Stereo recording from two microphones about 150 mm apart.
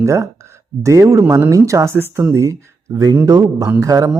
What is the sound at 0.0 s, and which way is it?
A man's voice, 20° right (ahead or behind).